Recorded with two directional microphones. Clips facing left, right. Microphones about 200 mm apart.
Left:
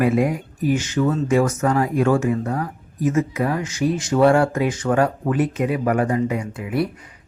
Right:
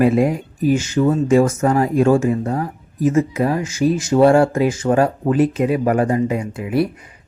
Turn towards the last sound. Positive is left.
turn(degrees=-25)  # may be behind; listen again after turning